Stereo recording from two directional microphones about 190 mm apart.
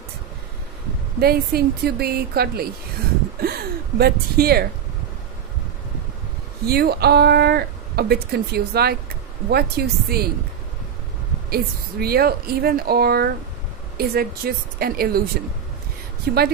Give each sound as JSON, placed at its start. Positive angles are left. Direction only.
{"t": 1.2, "sound": "speech", "side_deg": -55}
{"t": 3.3, "sound": "gasp", "side_deg": -55}
{"t": 6.6, "sound": "speech", "side_deg": -55}
{"t": 11.5, "sound": "speech", "side_deg": -55}
{"t": 16.3, "sound": "speech", "side_deg": -55}